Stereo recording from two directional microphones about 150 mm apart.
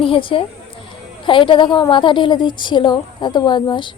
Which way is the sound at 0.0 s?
35° left (ahead or behind).